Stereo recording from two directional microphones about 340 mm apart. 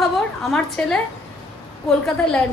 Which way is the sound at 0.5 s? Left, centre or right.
Centre.